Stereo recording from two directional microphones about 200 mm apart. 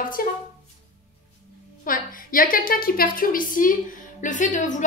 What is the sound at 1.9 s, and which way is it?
A woman's voice, 45° left (ahead or behind).